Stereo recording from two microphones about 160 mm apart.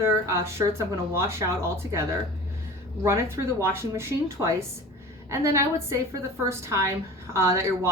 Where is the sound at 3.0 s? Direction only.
15° right (ahead or behind).